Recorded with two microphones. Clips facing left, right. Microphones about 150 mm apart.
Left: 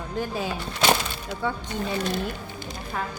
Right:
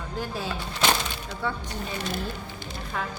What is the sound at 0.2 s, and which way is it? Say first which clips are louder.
Speech: left 3 dB; 15° left (ahead or behind).